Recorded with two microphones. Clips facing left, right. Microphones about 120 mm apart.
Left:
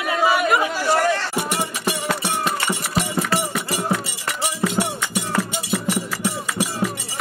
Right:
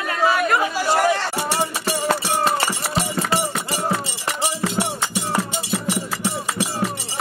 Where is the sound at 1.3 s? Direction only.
30° right (ahead or behind).